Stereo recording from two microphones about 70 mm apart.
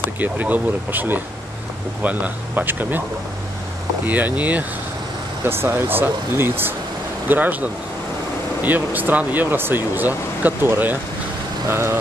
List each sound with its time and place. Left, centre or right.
0.2 s speech: right
4.0 s speech: right
5.4 s speech: right